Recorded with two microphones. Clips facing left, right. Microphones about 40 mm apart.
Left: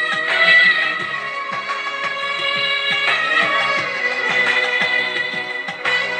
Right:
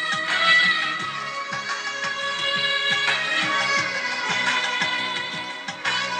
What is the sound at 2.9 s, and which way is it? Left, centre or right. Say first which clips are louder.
Music: left 5 dB; left.